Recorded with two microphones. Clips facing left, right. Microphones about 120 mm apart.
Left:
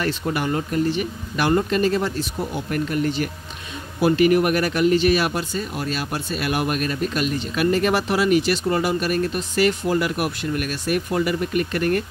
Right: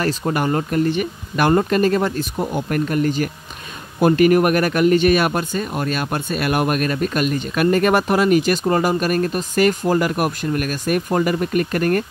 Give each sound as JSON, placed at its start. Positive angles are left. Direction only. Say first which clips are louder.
{"t": 0.0, "sound": "speech", "louder": "right 3 dB", "side_deg": -45}